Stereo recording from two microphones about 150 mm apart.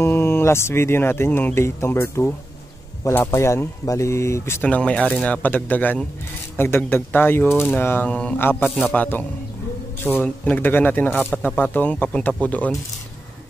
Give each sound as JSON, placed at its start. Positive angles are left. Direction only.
{"t": 0.0, "sound": "speech", "side_deg": 15}